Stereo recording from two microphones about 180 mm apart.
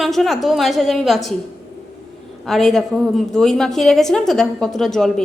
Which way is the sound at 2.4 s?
Centre (ahead or behind).